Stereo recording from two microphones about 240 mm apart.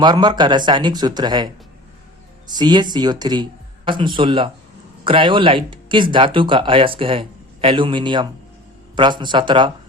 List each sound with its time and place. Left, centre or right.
0.0 s speech: centre
2.5 s speech: centre